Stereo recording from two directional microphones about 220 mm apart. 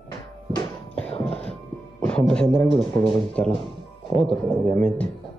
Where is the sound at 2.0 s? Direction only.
5° left (ahead or behind).